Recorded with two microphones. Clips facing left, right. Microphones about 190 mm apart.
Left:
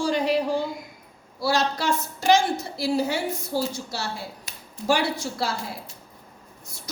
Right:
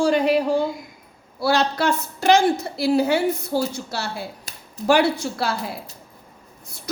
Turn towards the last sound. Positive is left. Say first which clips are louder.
# right 3 dB
turn(degrees=-60)  # may be behind; listen again after turning